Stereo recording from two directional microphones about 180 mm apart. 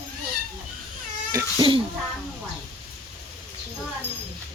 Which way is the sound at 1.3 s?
25° right (ahead or behind).